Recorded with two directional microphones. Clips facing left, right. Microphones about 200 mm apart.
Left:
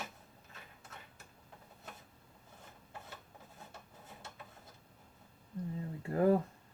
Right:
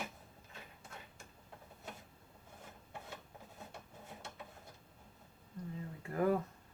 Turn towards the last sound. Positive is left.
turn(degrees=30)  # may be behind; listen again after turning